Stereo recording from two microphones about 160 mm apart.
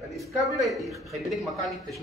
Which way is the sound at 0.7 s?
Centre (ahead or behind).